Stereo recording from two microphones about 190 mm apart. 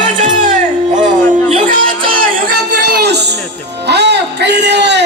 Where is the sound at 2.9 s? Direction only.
60° right (ahead or behind).